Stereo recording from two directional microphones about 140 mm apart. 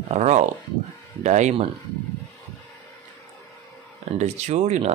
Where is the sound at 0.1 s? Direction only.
55° right (ahead or behind).